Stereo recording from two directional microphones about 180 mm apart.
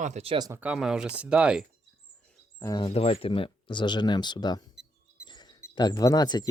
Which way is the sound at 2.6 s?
25° left (ahead or behind).